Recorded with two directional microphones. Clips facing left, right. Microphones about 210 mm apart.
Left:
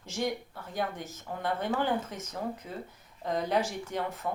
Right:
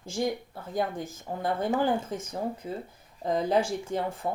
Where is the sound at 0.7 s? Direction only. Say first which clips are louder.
Right 4 dB; 40° right (ahead or behind).